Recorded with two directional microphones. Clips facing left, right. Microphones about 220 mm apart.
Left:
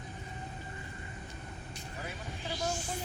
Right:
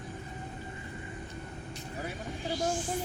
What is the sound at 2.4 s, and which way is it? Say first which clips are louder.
Music: right 5 dB; 50° right (ahead or behind).